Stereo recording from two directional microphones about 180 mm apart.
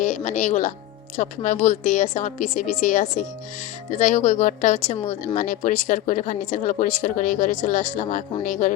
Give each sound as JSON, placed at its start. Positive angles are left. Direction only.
{"t": 0.0, "sound": "speech", "side_deg": 40}